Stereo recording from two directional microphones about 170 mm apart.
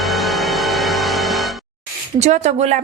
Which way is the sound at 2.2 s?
45° right (ahead or behind).